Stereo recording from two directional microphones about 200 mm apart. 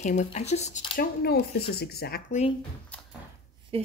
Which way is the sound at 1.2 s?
55° left (ahead or behind).